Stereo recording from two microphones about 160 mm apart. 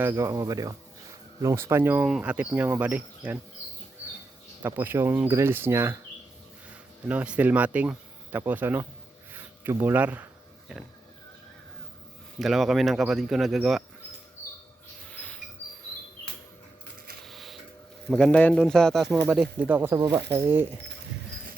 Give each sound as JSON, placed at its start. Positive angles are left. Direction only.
{"t": 0.0, "sound": "speech", "side_deg": -15}
{"t": 4.6, "sound": "speech", "side_deg": -15}
{"t": 7.1, "sound": "speech", "side_deg": -10}
{"t": 12.4, "sound": "speech", "side_deg": 0}
{"t": 15.1, "sound": "a sound", "side_deg": 10}
{"t": 17.2, "sound": "printer", "side_deg": 0}
{"t": 18.1, "sound": "speech", "side_deg": 5}